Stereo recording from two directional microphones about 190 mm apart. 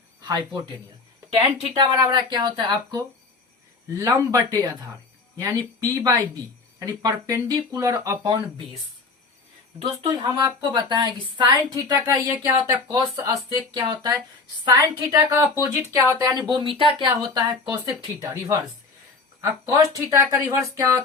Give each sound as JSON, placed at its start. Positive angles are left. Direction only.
{"t": 0.3, "sound": "a woman's voice", "side_deg": -20}
{"t": 1.7, "sound": "a woman's voice", "side_deg": -20}
{"t": 9.8, "sound": "a woman's voice", "side_deg": -25}
{"t": 16.5, "sound": "a woman's voice", "side_deg": -25}